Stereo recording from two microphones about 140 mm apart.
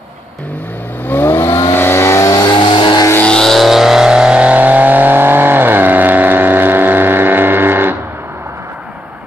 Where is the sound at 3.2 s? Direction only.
5° left (ahead or behind).